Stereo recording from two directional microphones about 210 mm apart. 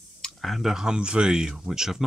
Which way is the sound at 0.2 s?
Centre (ahead or behind).